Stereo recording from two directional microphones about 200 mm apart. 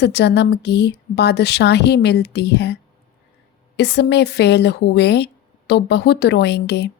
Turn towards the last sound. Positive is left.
turn(degrees=55)  # may be behind; listen again after turning